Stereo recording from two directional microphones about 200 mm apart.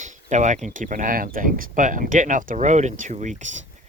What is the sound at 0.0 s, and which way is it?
Speech, 35° right (ahead or behind).